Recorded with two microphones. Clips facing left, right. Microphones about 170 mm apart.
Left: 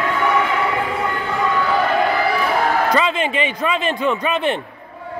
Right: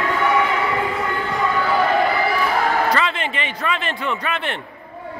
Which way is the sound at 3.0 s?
15° left (ahead or behind).